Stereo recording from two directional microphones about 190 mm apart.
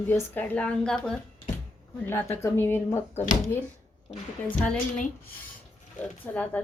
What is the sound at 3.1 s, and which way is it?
Speech, 40° left (ahead or behind).